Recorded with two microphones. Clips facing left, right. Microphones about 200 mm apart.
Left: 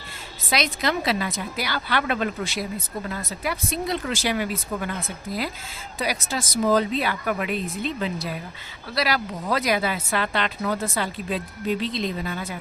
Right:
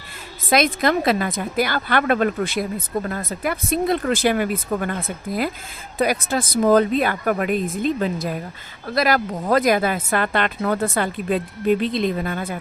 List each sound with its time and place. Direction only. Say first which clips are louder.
0.5 s a woman's voice: right 6 dB; 50° right (ahead or behind)